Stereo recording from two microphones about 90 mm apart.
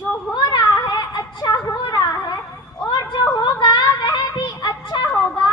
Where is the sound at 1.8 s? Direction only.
50° left (ahead or behind).